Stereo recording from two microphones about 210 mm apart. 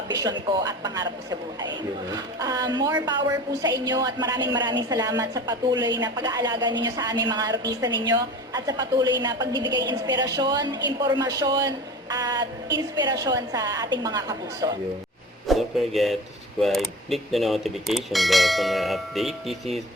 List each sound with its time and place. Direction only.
0.1 s a woman's voice: 20° right (ahead or behind)
15.4 s speech: centre (ahead or behind)